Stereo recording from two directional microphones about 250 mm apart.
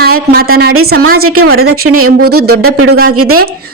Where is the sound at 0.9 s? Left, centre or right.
Right.